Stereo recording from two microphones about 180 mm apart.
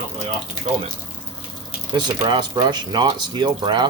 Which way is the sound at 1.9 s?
25° right (ahead or behind).